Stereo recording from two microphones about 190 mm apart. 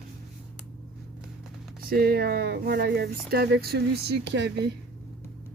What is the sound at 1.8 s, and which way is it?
Speech, 55° right (ahead or behind).